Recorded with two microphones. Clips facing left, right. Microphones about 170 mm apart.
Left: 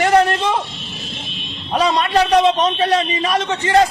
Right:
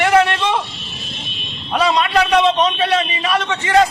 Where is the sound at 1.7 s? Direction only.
40° left (ahead or behind).